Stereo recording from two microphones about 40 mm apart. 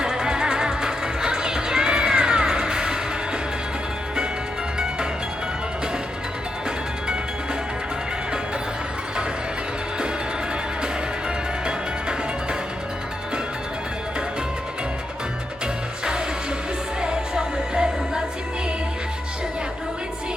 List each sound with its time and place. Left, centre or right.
0.1 s music: centre
11.6 s music: right
15.6 s music: centre